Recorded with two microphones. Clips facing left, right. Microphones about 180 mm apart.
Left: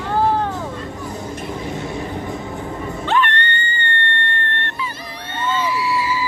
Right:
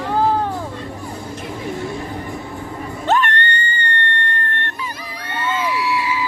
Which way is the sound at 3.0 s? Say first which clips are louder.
Right 2 dB; 45° right (ahead or behind).